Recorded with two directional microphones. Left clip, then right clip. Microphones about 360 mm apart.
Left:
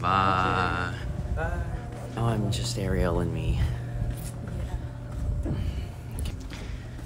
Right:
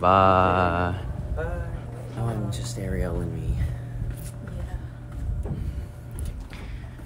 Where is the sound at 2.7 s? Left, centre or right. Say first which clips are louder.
Left 3 dB; centre.